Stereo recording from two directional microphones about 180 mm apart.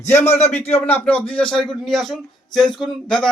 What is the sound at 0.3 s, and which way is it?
Speech, 35° left (ahead or behind).